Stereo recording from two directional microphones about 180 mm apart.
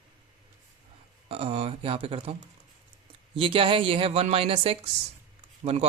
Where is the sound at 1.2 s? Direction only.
30° right (ahead or behind).